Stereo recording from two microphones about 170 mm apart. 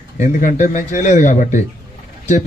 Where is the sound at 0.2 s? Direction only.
50° left (ahead or behind).